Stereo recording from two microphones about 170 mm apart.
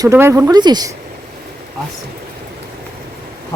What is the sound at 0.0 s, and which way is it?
Speech, 15° right (ahead or behind).